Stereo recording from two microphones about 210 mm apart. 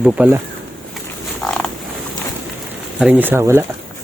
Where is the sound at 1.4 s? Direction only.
5° left (ahead or behind).